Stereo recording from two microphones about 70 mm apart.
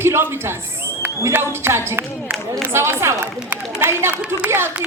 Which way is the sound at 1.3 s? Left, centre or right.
Right.